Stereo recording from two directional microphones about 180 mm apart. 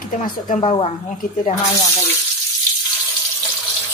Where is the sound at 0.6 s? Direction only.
30° left (ahead or behind).